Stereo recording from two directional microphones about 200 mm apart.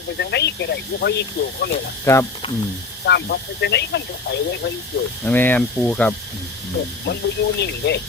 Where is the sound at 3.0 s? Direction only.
55° left (ahead or behind).